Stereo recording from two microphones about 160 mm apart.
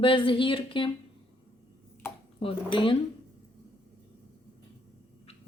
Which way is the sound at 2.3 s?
35° left (ahead or behind).